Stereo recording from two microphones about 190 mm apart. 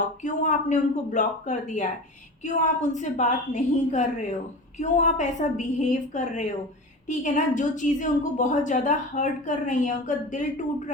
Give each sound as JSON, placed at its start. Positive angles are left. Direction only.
{"t": 0.2, "sound": "a woman's voice", "side_deg": 40}